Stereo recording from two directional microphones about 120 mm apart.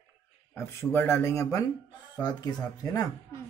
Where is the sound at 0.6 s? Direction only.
20° left (ahead or behind).